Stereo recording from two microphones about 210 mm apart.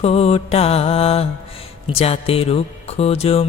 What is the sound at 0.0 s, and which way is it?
Mantra, 30° left (ahead or behind).